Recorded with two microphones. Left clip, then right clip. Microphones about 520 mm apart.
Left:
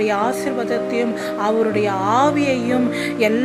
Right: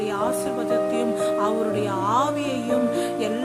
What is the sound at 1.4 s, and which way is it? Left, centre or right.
A woman's voice, right.